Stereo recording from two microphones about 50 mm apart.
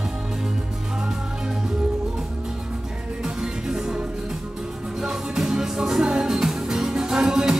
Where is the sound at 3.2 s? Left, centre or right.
Centre.